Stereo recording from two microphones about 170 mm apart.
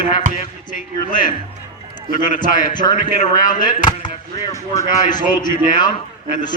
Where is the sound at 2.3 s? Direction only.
50° left (ahead or behind).